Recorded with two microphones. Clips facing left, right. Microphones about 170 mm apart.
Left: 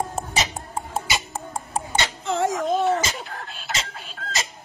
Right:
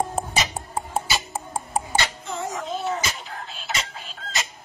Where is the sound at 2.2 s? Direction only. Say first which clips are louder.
Left 8 dB; 90° left.